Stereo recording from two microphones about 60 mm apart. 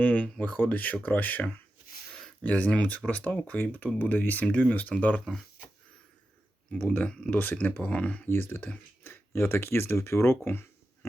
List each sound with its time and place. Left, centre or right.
0.0 s speech: left
5.2 s speech: centre
6.7 s speech: left
8.3 s speech: left